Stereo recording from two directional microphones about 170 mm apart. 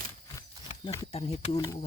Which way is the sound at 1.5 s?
20° left (ahead or behind).